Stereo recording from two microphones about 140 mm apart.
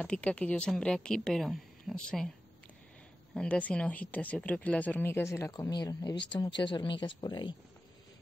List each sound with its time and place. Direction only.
0.0 s speech: 5° left (ahead or behind)
3.3 s speech: 10° left (ahead or behind); by 7.5 s 35° left (ahead or behind)